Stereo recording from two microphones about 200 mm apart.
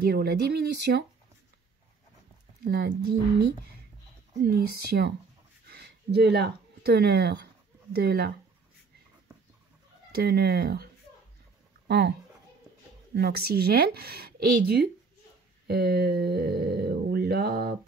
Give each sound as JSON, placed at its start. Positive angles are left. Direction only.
{"t": 0.0, "sound": "speech", "side_deg": -55}
{"t": 2.7, "sound": "speech", "side_deg": -50}
{"t": 4.5, "sound": "speech", "side_deg": -50}
{"t": 10.1, "sound": "speech", "side_deg": -50}
{"t": 13.1, "sound": "speech", "side_deg": -50}